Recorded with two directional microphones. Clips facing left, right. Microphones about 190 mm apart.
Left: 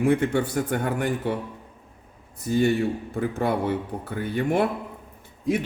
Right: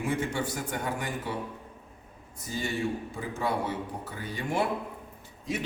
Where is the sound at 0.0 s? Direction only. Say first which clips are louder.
Left 9 dB; 60° left (ahead or behind).